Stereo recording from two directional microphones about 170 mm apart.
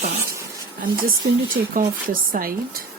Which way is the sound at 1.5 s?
55° right (ahead or behind).